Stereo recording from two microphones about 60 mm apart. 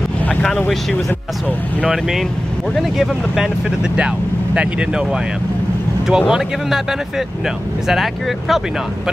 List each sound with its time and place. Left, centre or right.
1.9 s speech: centre